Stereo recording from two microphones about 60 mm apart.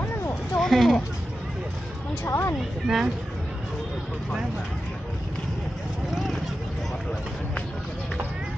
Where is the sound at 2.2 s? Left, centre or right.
Left.